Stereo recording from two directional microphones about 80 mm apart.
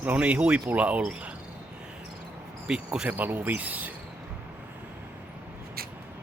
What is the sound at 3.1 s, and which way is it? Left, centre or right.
Speech, right.